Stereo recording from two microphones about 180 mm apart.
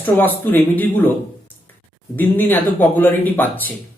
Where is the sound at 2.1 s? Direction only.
10° left (ahead or behind).